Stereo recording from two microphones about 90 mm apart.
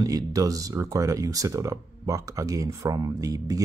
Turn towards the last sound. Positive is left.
turn(degrees=-40)  # may be behind; listen again after turning